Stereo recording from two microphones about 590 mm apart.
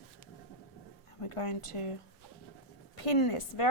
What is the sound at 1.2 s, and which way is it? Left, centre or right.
A woman's voice, left.